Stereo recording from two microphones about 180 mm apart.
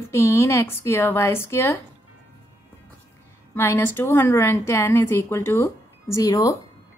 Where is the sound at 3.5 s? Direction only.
15° left (ahead or behind).